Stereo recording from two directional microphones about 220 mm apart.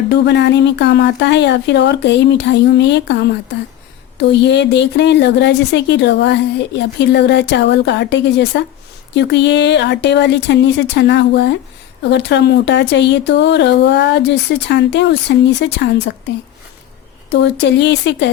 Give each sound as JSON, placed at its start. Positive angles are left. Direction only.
{"t": 0.1, "sound": "speech", "side_deg": 50}
{"t": 17.2, "sound": "speech", "side_deg": 50}